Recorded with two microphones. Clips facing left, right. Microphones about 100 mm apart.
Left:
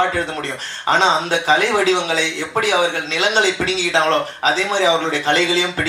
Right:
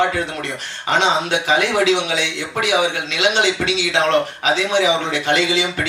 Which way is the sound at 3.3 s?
35° left (ahead or behind).